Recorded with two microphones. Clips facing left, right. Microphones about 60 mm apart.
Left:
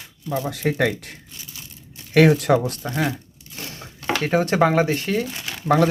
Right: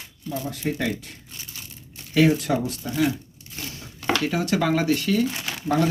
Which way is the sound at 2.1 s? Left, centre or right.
Left.